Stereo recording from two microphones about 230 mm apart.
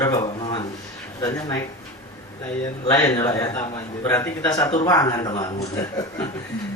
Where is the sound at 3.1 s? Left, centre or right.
Centre.